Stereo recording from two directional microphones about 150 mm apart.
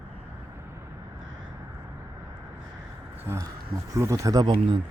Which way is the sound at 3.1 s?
20° right (ahead or behind).